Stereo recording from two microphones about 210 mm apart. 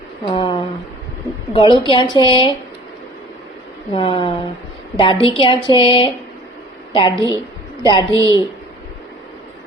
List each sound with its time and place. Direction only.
0.3 s a woman's voice: 25° left (ahead or behind)
3.9 s a woman's voice: 25° left (ahead or behind)
8.1 s a woman's voice: 15° right (ahead or behind)